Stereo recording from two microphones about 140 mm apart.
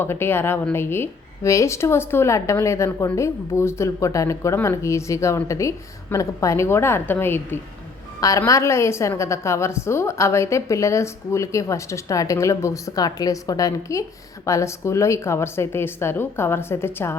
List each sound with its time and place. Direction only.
0.0 s a woman's voice: 15° left (ahead or behind)